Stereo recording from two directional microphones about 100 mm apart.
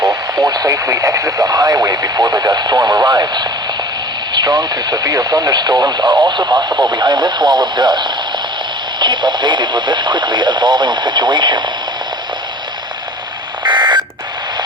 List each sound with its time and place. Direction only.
0.0 s speech: 40° right (ahead or behind)
13.7 s alarm clock: 50° right (ahead or behind)